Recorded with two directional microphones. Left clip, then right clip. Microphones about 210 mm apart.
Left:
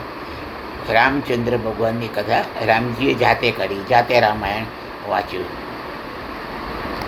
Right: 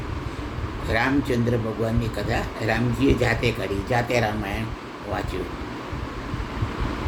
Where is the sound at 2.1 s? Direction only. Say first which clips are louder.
Left 8 dB; 25° right (ahead or behind).